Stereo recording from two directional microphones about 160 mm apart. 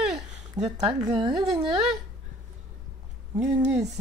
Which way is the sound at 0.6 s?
20° right (ahead or behind).